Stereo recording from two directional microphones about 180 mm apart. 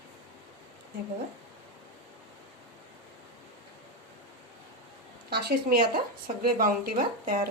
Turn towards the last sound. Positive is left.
turn(degrees=-50)  # may be behind; listen again after turning